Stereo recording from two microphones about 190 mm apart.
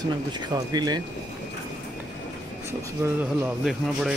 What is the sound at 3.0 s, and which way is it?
Speech, 10° right (ahead or behind).